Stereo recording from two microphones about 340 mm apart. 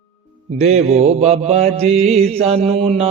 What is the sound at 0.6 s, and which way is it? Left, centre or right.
Mantra, centre.